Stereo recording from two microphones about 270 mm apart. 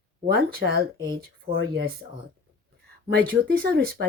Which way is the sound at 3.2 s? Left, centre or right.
Right.